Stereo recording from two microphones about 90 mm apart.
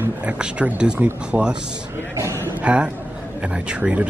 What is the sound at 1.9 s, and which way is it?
Speech, 35° right (ahead or behind).